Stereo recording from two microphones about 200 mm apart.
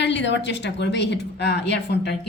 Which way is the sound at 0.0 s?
60° left (ahead or behind).